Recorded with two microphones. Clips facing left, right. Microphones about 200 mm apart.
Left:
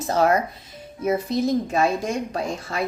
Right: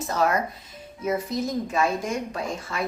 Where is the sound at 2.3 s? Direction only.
35° left (ahead or behind).